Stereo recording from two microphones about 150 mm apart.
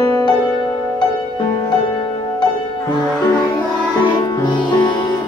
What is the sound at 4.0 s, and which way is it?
Music, 25° left (ahead or behind).